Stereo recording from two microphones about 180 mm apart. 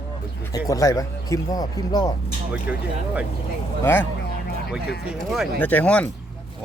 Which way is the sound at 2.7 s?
5° right (ahead or behind).